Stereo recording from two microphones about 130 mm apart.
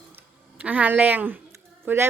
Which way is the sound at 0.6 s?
10° right (ahead or behind).